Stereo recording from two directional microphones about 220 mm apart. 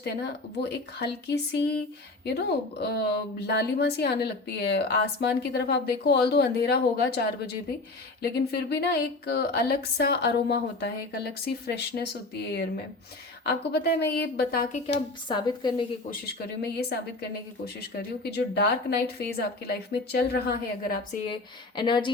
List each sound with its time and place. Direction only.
0.6 s a woman's voice: 50° left (ahead or behind)
13.8 s a woman's voice: 50° left (ahead or behind)
15.3 s a woman's voice: 20° left (ahead or behind)
16.6 s a woman's voice: 45° left (ahead or behind)
21.8 s a woman's voice: 20° left (ahead or behind)